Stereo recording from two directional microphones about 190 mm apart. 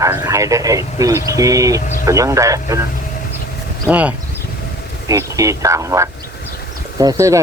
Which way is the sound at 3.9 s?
5° right (ahead or behind).